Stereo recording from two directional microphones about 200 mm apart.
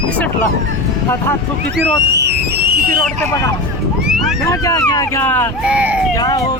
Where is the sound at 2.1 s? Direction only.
55° right (ahead or behind).